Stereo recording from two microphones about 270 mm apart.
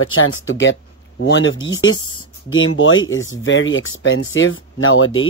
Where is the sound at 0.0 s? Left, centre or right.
Left.